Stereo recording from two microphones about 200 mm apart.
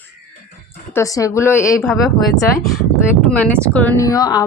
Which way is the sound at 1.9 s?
Centre (ahead or behind).